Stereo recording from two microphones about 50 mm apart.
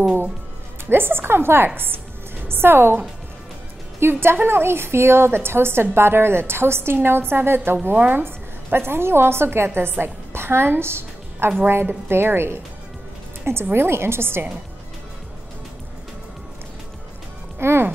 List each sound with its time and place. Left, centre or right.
0.8 s a woman's voice: right
4.0 s a woman's voice: right
8.2 s a woman's voice: right
11.6 s a woman's voice: right
13.7 s a woman's voice: right
17.6 s music: right